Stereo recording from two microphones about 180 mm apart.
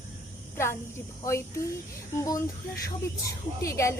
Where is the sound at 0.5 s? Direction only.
15° left (ahead or behind).